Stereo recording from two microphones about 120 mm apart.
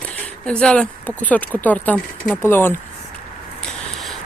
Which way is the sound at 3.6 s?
5° left (ahead or behind).